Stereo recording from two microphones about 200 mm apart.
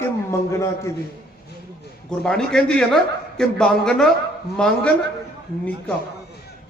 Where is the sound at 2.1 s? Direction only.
5° left (ahead or behind).